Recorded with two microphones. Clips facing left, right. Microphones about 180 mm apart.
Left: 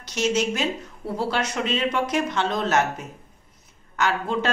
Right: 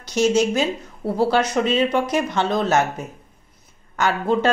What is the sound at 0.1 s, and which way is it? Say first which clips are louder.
Speech: right 6 dB; 40° right (ahead or behind).